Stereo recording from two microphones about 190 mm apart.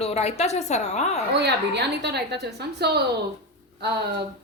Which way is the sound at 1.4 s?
60° right (ahead or behind).